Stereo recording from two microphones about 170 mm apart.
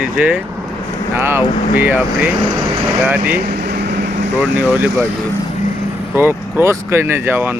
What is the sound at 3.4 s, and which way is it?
Vehicle, 65° right (ahead or behind).